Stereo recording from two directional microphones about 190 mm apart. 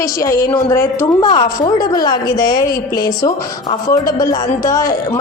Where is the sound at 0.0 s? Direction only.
15° left (ahead or behind).